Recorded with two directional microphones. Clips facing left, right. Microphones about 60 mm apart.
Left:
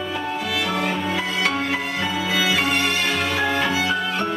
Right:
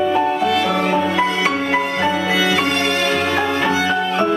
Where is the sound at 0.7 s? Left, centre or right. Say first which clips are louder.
Right 6 dB; centre.